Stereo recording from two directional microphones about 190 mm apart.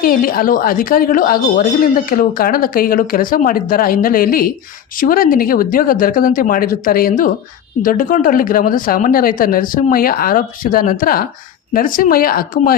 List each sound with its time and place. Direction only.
0.0 s a woman's voice: 50° left (ahead or behind)